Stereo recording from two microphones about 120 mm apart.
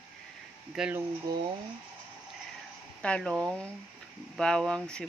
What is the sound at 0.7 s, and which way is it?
Speech, centre (ahead or behind).